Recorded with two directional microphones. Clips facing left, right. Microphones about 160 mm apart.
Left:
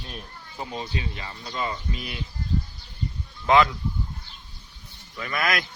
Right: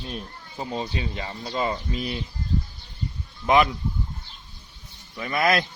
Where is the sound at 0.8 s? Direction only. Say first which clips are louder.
Right 3 dB; 35° right (ahead or behind).